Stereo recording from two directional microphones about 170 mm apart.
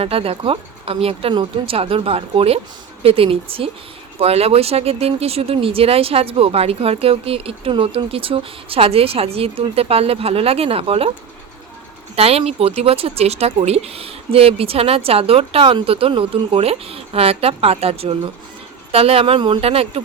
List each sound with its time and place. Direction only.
0.0 s speech: 35° right (ahead or behind)
12.1 s speech: 35° right (ahead or behind)